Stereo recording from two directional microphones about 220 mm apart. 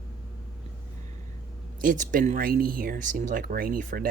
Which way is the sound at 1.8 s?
35° right (ahead or behind).